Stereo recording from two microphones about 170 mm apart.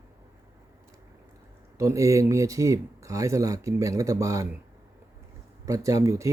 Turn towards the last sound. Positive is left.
turn(degrees=-20)  # may be behind; listen again after turning